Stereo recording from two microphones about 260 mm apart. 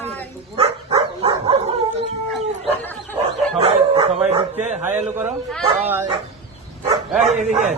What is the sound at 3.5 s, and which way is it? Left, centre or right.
Bow-wow, right.